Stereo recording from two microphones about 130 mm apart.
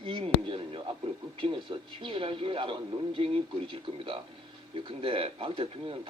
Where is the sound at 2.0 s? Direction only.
40° right (ahead or behind).